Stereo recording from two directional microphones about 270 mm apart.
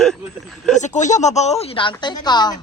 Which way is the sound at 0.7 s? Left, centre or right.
Left.